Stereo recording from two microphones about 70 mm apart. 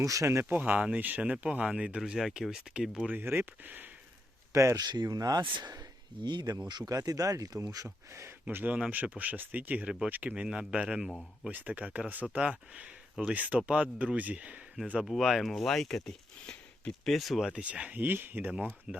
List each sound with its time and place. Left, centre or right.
0.0 s speech: right
0.4 s speech: right
2.0 s speech: centre
3.1 s speech: right
4.5 s speech: right
4.8 s speech: right
8.5 s speech: right
11.5 s speech: right
15.2 s speech: centre
17.4 s speech: centre
18.9 s speech: centre